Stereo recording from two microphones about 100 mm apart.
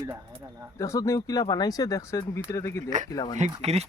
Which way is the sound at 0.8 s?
35° left (ahead or behind).